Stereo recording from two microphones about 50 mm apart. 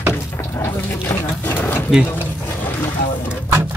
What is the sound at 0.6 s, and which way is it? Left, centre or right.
Dog, left.